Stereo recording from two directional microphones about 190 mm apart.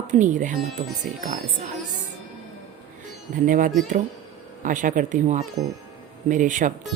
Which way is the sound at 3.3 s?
45° right (ahead or behind).